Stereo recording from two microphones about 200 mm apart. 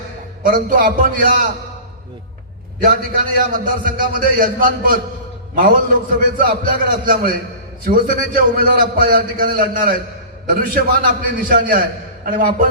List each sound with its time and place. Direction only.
0.4 s a man's voice: 45° right (ahead or behind)
2.8 s a man's voice: 45° right (ahead or behind)